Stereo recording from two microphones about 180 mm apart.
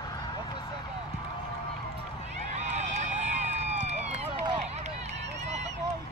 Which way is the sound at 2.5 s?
40° right (ahead or behind).